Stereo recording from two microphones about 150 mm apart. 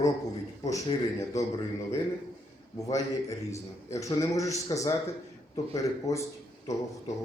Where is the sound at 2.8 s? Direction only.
20° left (ahead or behind).